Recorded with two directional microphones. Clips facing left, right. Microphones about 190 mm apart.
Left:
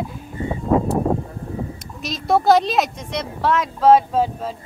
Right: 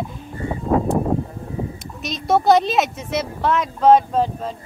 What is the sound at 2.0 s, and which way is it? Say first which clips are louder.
A woman's voice: even; centre (ahead or behind).